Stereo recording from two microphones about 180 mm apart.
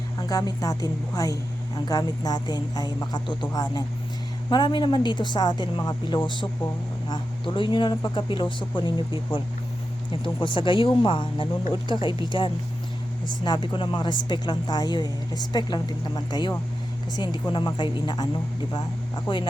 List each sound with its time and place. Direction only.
0.2 s speech: 20° left (ahead or behind)
19.3 s speech: 25° left (ahead or behind)